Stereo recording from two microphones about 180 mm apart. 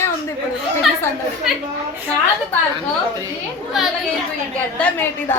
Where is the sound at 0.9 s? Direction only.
Centre (ahead or behind).